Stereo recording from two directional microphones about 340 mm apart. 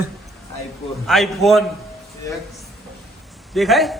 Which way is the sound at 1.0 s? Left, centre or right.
Centre.